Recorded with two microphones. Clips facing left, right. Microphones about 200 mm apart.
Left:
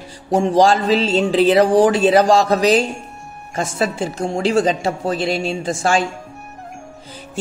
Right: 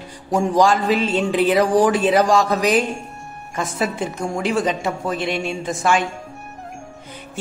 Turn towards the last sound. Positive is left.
turn(degrees=30)  # may be behind; listen again after turning